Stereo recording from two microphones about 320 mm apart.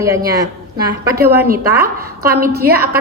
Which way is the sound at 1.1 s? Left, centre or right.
Right.